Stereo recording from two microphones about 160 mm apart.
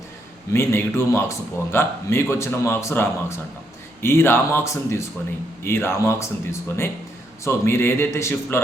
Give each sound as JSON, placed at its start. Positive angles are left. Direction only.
{"t": 0.5, "sound": "a man's voice", "side_deg": 15}